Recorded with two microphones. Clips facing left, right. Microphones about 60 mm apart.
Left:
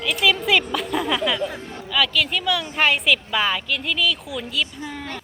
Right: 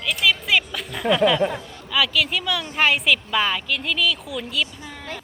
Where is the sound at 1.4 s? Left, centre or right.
Right.